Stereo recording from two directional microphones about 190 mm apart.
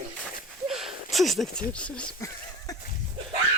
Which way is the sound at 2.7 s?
20° left (ahead or behind).